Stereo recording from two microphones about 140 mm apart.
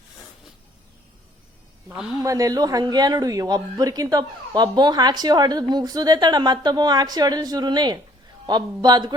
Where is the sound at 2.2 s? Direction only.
25° right (ahead or behind).